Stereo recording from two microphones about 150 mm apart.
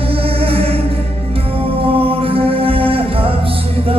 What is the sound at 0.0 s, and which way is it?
Music, 40° right (ahead or behind).